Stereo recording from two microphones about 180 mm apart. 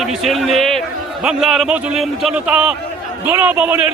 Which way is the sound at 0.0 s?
Centre (ahead or behind).